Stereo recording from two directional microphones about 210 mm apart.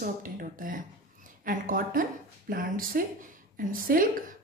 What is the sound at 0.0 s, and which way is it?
A woman's voice, 40° right (ahead or behind).